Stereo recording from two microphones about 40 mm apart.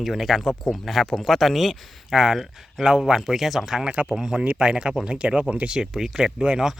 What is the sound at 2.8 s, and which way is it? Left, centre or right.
Speech, centre.